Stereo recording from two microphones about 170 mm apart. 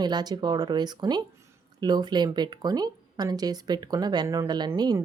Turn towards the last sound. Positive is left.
turn(degrees=-25)  # may be behind; listen again after turning